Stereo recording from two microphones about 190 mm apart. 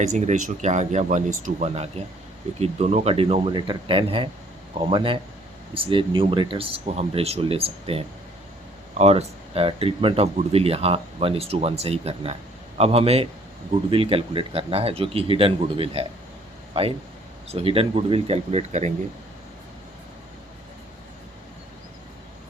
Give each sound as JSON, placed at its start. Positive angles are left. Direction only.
{"t": 0.0, "sound": "speech", "side_deg": -40}
{"t": 17.5, "sound": "speech", "side_deg": -30}